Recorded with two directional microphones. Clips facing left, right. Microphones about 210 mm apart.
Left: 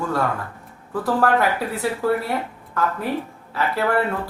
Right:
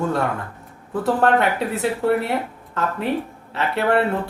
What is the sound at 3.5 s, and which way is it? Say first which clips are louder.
Speech: right 2 dB; 25° right (ahead or behind).